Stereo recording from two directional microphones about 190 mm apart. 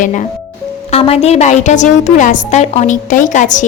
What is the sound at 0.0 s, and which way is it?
A woman's voice, 40° left (ahead or behind).